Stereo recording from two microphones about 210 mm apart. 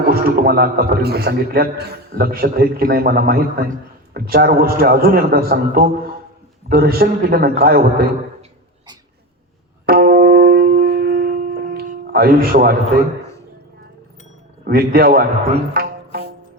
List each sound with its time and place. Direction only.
0.1 s a man's voice: 45° right (ahead or behind)
9.8 s music: 45° right (ahead or behind)
14.7 s a man's voice: 45° right (ahead or behind)
15.7 s music: 45° right (ahead or behind)